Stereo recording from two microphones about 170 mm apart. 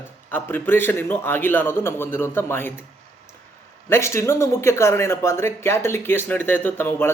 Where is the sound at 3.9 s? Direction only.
15° left (ahead or behind).